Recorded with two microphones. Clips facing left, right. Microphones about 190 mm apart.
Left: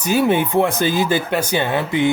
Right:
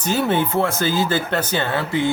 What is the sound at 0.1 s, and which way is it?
Speech, 10° left (ahead or behind).